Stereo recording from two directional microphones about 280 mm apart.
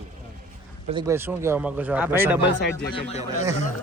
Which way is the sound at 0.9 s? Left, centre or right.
Centre.